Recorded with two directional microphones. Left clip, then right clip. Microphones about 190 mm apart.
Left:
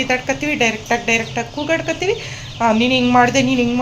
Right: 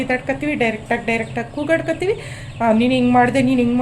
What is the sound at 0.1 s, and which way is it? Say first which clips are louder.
A woman's voice: left 2 dB; 10° right (ahead or behind).